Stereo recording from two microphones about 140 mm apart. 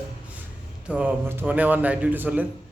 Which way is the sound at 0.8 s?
10° right (ahead or behind).